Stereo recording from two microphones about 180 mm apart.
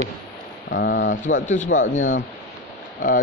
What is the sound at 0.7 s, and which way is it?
Speech, 75° left (ahead or behind).